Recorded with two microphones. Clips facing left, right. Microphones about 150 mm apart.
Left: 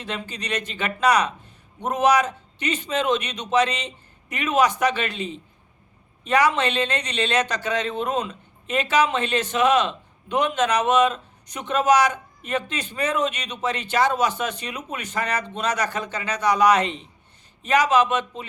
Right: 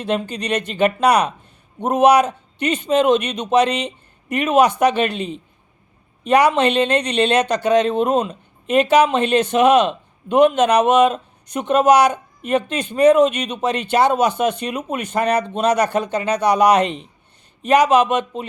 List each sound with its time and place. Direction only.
0.0 s speech: 60° right (ahead or behind)